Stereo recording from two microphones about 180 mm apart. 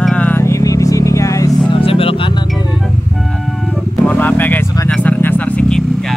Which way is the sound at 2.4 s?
Centre (ahead or behind).